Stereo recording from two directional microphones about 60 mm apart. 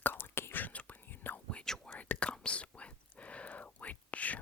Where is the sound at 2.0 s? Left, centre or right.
Left.